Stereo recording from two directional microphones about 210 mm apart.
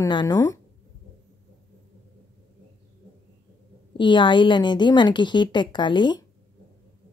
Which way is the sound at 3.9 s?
20° left (ahead or behind).